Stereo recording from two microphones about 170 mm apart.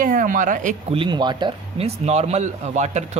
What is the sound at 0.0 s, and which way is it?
Speech, 55° right (ahead or behind).